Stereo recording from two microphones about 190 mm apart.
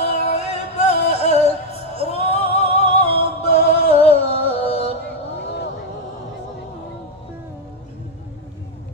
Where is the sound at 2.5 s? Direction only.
35° left (ahead or behind).